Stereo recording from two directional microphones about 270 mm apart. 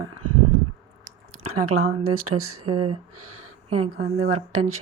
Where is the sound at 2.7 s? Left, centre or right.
Right.